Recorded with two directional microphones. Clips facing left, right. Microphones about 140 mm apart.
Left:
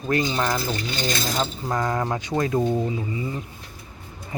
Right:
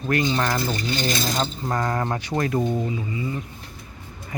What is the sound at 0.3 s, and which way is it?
Mechanisms, 5° left (ahead or behind).